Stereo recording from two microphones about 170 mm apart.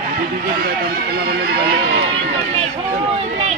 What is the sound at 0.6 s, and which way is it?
Run, 65° right (ahead or behind).